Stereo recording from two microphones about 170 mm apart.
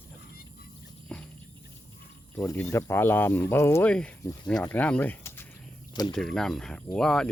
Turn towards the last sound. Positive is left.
turn(degrees=5)  # may be behind; listen again after turning